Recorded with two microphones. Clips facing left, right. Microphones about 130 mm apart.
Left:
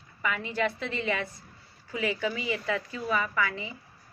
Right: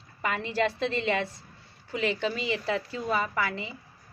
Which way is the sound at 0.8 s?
25° right (ahead or behind).